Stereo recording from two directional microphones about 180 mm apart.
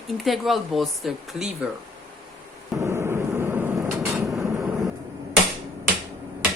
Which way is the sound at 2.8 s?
15° right (ahead or behind).